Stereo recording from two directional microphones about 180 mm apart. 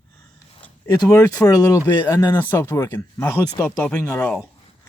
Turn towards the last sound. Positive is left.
turn(degrees=5)  # may be behind; listen again after turning